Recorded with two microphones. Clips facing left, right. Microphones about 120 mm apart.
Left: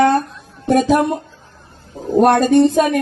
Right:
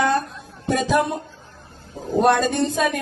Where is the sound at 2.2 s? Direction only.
55° left (ahead or behind).